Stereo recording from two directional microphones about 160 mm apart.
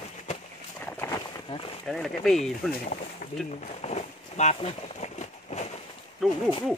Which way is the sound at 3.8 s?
45° left (ahead or behind).